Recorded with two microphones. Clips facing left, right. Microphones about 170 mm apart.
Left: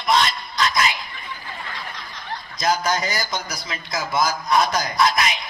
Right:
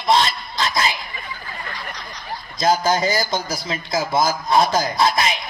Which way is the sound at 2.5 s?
25° right (ahead or behind).